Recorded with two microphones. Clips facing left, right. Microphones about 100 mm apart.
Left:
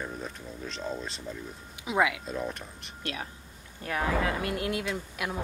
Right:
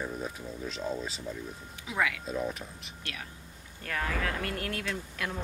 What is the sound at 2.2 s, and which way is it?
Speech, centre (ahead or behind).